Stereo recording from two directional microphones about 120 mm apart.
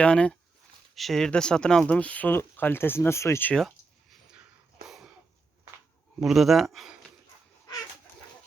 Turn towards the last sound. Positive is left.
turn(degrees=-5)  # may be behind; listen again after turning